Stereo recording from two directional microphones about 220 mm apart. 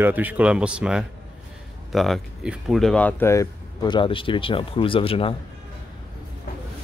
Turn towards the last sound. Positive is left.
turn(degrees=25)  # may be behind; listen again after turning